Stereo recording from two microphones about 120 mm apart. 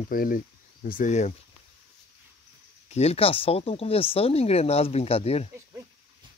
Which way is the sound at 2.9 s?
60° left (ahead or behind).